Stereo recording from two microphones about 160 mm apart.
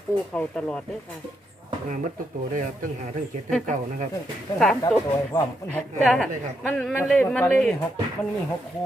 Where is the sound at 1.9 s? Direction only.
55° right (ahead or behind).